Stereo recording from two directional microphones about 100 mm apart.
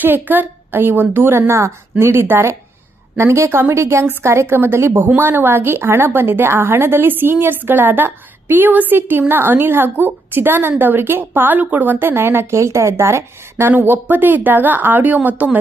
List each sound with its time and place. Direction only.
0.0 s a woman's voice: 20° right (ahead or behind)